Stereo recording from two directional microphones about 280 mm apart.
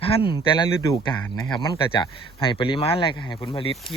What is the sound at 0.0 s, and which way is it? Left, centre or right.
Speech, centre.